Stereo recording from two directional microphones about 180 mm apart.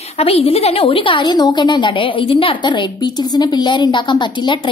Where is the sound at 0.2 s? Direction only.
35° left (ahead or behind).